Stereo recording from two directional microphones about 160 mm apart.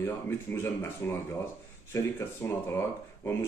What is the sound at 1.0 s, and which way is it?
Speech, 15° left (ahead or behind).